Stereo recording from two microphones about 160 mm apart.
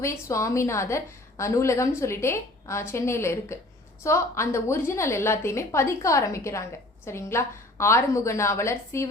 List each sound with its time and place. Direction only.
0.0 s a woman's voice: 20° left (ahead or behind)